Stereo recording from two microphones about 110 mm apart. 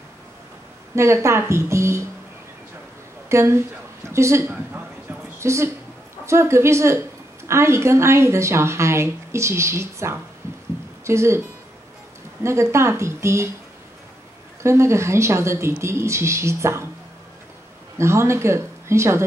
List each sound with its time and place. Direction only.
0.9 s speech: 25° right (ahead or behind)
3.3 s a woman's voice: 25° right (ahead or behind)
12.4 s speech: 25° right (ahead or behind)
14.6 s speech: 25° right (ahead or behind)
17.9 s speech: 25° right (ahead or behind)